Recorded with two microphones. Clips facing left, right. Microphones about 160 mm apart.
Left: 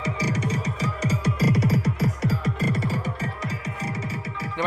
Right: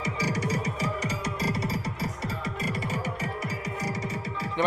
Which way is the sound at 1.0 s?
60° left (ahead or behind).